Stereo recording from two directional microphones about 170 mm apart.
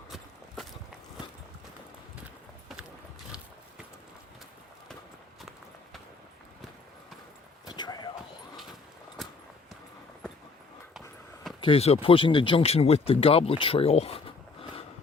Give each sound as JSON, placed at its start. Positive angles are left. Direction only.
{"t": 0.1, "sound": "walk", "side_deg": 0}
{"t": 5.4, "sound": "clip-clop", "side_deg": 0}
{"t": 7.6, "sound": "a sound", "side_deg": 25}
{"t": 11.6, "sound": "speech", "side_deg": 35}